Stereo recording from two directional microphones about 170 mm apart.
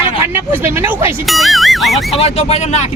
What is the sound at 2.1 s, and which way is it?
Speech, 35° left (ahead or behind).